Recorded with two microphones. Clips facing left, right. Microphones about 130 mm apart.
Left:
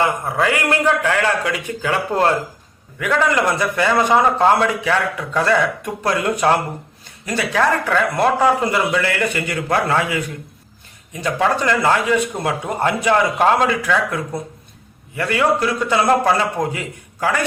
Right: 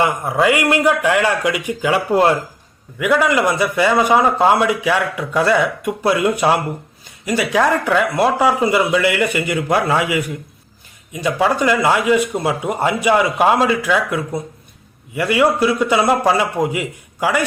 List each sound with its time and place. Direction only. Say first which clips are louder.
0.0 s a man's voice: right 2 dB; 15° right (ahead or behind)